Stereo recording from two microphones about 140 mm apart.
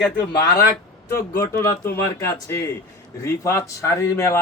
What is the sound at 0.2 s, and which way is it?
A man's voice, 25° left (ahead or behind).